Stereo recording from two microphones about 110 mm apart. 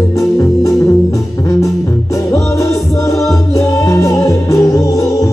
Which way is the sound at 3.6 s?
30° left (ahead or behind).